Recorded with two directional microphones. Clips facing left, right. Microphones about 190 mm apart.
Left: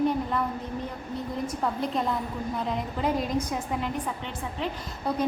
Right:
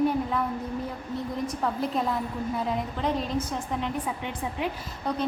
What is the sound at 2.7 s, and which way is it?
A woman's voice, 5° left (ahead or behind).